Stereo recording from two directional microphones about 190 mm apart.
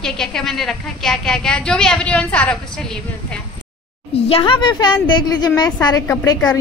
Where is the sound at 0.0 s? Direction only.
5° left (ahead or behind).